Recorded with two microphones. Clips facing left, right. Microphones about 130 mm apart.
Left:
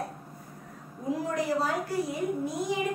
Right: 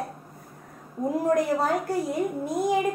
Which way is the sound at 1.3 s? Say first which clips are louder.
Right 6 dB; 50° right (ahead or behind).